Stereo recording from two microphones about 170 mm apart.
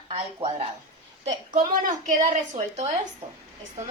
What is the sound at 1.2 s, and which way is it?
A woman's voice, 50° right (ahead or behind).